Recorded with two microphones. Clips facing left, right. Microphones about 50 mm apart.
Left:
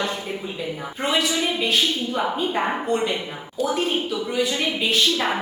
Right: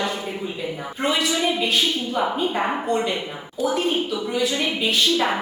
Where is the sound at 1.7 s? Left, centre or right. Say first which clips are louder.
Even; centre.